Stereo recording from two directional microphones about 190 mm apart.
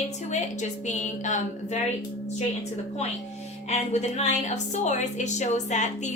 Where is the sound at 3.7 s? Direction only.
35° left (ahead or behind).